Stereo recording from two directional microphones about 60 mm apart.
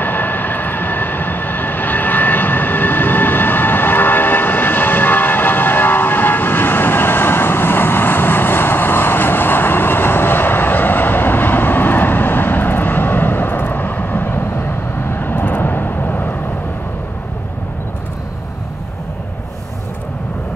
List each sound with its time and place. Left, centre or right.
0.0 s vehicle: left